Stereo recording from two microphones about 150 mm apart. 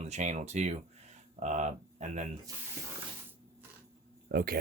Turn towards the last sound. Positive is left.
turn(degrees=-90)